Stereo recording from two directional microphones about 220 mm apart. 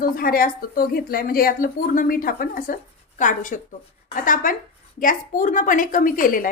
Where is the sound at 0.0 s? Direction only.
40° left (ahead or behind).